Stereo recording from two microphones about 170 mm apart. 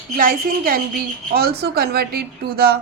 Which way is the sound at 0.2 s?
55° right (ahead or behind).